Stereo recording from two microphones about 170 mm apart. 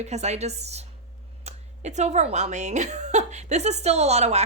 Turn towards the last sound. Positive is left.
turn(degrees=-40)  # may be behind; listen again after turning